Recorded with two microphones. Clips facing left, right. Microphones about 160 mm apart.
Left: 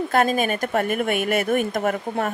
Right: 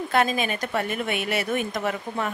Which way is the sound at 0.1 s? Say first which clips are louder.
Left 2 dB; 45° left (ahead or behind).